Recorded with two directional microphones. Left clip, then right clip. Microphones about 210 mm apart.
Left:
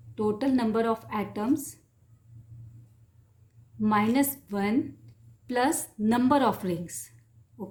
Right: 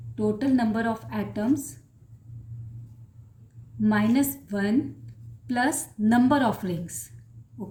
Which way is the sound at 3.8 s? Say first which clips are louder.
Even; 25° left (ahead or behind).